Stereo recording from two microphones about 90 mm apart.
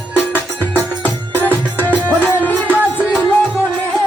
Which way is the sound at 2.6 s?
15° right (ahead or behind).